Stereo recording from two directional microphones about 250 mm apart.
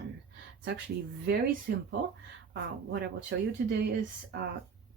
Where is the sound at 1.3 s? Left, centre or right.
Right.